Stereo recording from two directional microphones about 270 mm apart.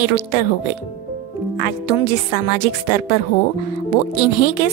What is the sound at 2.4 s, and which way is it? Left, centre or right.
Music, left.